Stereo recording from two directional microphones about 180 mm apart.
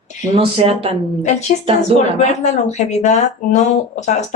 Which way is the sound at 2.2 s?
40° left (ahead or behind).